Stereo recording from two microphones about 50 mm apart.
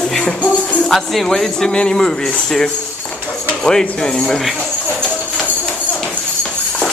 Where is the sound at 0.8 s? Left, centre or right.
Centre.